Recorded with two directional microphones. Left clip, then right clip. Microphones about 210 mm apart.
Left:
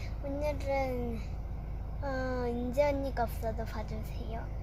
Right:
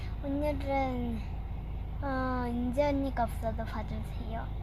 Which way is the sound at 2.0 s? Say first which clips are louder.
Right 1 dB; 5° right (ahead or behind).